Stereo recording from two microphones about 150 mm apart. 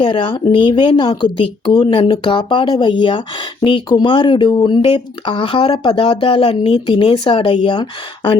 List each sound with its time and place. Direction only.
0.0 s speech: 35° left (ahead or behind)